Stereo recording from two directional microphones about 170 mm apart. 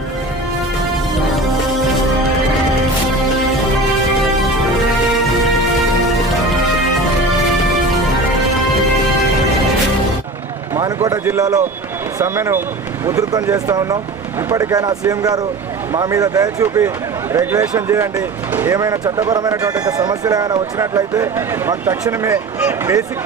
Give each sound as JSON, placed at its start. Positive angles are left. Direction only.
{"t": 10.8, "sound": "a sound", "side_deg": -20}
{"t": 12.2, "sound": "speech", "side_deg": -15}
{"t": 18.7, "sound": "speech", "side_deg": -20}